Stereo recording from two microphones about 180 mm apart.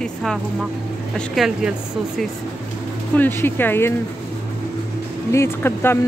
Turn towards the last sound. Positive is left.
turn(degrees=15)  # may be behind; listen again after turning